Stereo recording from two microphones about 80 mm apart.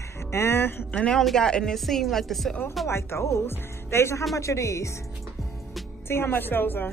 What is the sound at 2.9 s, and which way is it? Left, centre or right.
Speech, left.